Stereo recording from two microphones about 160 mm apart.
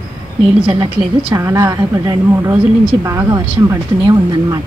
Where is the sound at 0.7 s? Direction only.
35° right (ahead or behind).